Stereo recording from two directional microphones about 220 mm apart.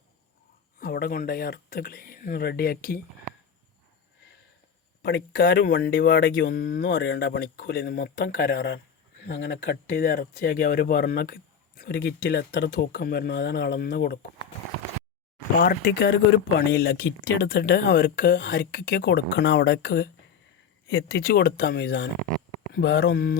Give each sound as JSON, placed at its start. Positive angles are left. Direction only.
{"t": 0.8, "sound": "speech", "side_deg": 45}
{"t": 5.3, "sound": "speech", "side_deg": 40}
{"t": 15.5, "sound": "speech", "side_deg": 40}